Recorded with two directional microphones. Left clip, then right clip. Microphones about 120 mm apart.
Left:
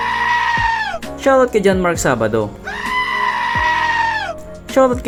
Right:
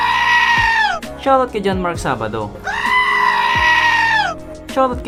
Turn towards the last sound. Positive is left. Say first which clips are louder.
# left 3 dB
turn(degrees=40)  # may be behind; listen again after turning